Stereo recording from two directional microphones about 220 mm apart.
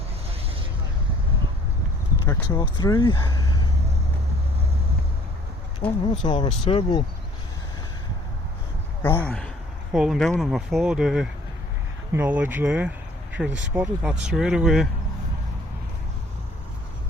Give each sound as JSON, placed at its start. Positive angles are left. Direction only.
{"t": 2.2, "sound": "speech", "side_deg": 15}
{"t": 5.8, "sound": "speech", "side_deg": 5}
{"t": 6.2, "sound": "speech", "side_deg": 20}
{"t": 9.0, "sound": "speech", "side_deg": 10}